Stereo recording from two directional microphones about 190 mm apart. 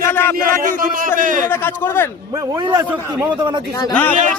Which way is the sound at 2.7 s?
20° right (ahead or behind).